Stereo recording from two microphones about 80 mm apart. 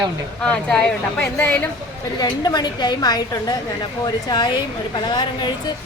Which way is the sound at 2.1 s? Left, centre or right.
Left.